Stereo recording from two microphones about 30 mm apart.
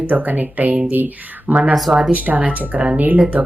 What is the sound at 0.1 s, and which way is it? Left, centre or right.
Speech, right.